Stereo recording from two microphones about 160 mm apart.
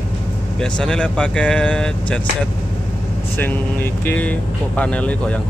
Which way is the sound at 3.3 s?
10° left (ahead or behind).